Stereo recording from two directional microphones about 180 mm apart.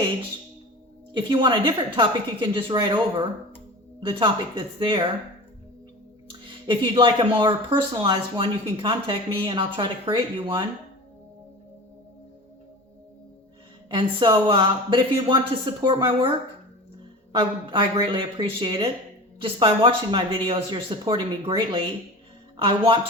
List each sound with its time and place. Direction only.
1.1 s speech: 25° right (ahead or behind)
6.2 s speech: 25° right (ahead or behind)
13.9 s speech: 25° right (ahead or behind)
17.3 s speech: 25° right (ahead or behind)